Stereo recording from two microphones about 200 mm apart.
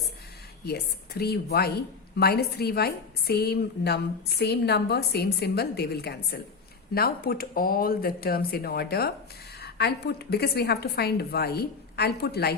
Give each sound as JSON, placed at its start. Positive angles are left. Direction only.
{"t": 0.6, "sound": "a woman's voice", "side_deg": 55}